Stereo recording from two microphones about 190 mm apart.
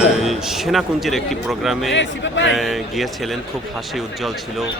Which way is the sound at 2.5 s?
Centre (ahead or behind).